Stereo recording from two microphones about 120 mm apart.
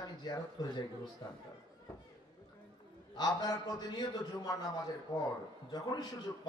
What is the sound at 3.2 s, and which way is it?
A man's voice, 35° left (ahead or behind).